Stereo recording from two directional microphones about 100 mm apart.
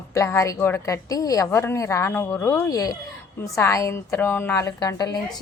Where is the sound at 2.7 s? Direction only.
35° left (ahead or behind).